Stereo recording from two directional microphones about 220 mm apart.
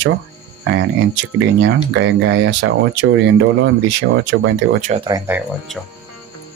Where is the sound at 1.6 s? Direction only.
55° right (ahead or behind).